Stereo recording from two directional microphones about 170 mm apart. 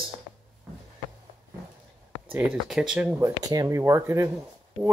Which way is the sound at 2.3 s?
5° right (ahead or behind).